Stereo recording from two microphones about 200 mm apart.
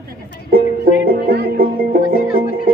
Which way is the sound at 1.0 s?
50° right (ahead or behind).